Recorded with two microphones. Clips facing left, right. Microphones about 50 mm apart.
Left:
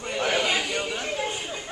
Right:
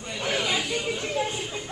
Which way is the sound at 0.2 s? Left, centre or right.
Left.